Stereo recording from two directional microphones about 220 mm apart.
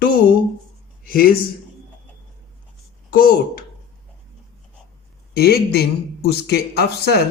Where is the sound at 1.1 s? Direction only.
40° left (ahead or behind).